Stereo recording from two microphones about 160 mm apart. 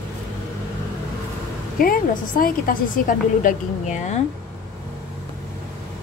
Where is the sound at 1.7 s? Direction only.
60° left (ahead or behind).